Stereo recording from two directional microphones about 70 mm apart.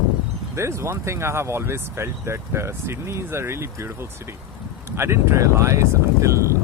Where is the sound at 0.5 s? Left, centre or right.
Right.